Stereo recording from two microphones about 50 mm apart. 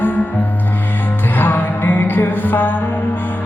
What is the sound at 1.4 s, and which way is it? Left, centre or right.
Music, left.